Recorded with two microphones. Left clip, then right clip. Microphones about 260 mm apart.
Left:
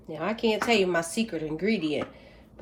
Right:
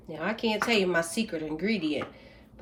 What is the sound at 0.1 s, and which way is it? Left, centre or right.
A woman's voice, centre.